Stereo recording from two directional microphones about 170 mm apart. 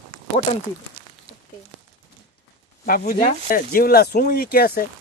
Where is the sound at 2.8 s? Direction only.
55° left (ahead or behind).